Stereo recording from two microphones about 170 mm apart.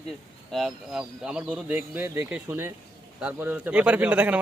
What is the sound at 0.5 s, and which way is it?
A man's voice, centre (ahead or behind).